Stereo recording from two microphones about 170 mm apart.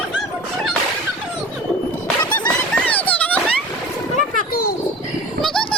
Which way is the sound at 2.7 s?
10° left (ahead or behind).